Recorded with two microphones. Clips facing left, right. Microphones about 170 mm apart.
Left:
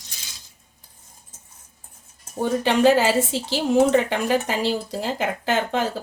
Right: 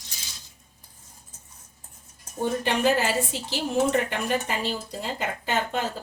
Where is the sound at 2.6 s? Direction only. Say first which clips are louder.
Left 7 dB; 90° left.